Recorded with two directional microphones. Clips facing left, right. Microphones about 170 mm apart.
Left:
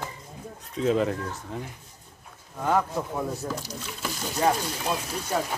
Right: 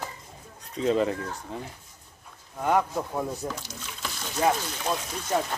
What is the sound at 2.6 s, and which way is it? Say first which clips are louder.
Speech: even; 15° right (ahead or behind).